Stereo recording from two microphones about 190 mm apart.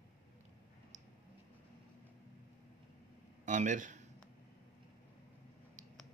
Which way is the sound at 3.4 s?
40° right (ahead or behind).